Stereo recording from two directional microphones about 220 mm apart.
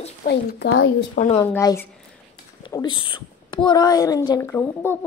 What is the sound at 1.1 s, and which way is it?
Speech, 35° left (ahead or behind).